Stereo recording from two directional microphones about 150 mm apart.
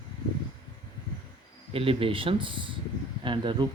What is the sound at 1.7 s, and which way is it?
Speech, 40° right (ahead or behind).